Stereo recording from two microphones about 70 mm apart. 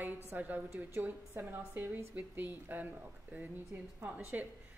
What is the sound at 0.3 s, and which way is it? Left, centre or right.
A woman's voice, right.